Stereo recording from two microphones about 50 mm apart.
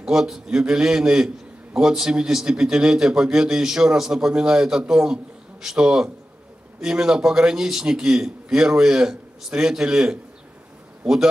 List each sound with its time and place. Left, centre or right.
0.0 s a man's voice: centre
11.0 s a man's voice: centre